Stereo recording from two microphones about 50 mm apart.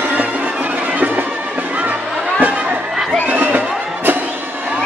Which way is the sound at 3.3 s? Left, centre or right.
Right.